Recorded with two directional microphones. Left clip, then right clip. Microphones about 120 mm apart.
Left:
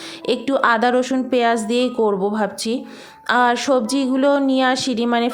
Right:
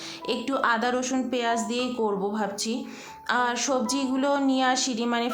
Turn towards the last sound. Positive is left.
turn(degrees=50)  # may be behind; listen again after turning